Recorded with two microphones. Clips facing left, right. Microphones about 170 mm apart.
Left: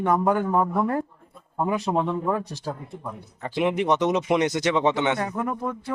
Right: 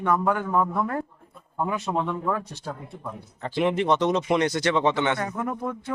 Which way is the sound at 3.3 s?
10° left (ahead or behind).